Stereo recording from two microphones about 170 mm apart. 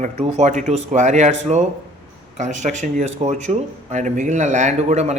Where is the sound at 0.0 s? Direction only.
40° right (ahead or behind).